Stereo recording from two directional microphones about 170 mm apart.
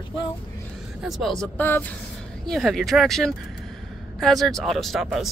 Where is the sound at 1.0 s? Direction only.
Centre (ahead or behind).